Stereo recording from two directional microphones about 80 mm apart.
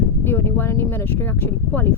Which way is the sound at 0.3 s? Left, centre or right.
Left.